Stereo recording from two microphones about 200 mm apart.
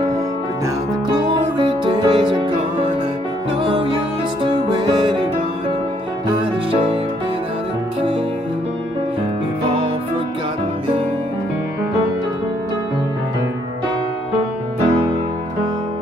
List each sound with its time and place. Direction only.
1.3 s music: 25° right (ahead or behind)